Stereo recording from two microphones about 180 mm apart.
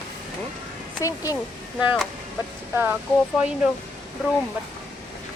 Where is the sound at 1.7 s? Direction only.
Centre (ahead or behind).